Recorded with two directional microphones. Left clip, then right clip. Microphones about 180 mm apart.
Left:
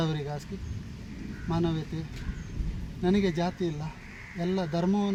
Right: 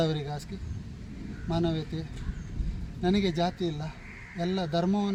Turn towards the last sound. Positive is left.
turn(degrees=-10)  # may be behind; listen again after turning